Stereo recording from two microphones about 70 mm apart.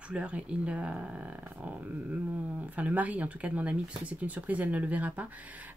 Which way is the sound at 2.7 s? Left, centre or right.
Right.